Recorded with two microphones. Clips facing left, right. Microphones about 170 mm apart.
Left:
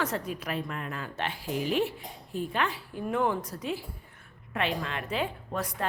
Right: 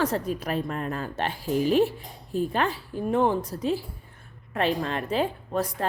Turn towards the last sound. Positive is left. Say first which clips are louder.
# right 5 dB
turn(degrees=-35)  # may be behind; listen again after turning